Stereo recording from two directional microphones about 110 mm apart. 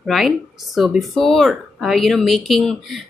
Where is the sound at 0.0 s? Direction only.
Centre (ahead or behind).